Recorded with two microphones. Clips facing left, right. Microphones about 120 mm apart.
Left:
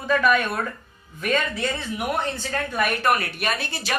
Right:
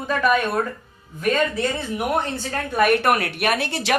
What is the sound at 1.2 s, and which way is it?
Speech, 40° right (ahead or behind).